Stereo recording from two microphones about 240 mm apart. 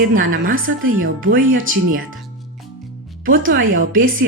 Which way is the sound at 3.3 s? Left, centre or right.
Right.